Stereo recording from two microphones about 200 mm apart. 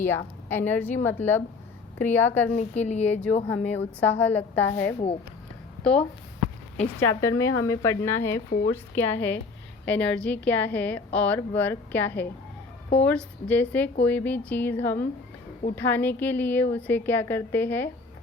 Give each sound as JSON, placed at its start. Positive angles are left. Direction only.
{"t": 0.0, "sound": "a woman's voice", "side_deg": 10}
{"t": 2.5, "sound": "a woman's voice", "side_deg": 35}
{"t": 3.1, "sound": "a woman's voice", "side_deg": 10}
{"t": 7.2, "sound": "a woman's voice", "side_deg": 15}